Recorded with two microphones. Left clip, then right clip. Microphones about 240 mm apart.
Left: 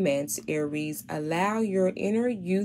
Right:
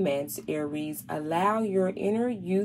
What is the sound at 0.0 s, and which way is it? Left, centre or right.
Speech, left.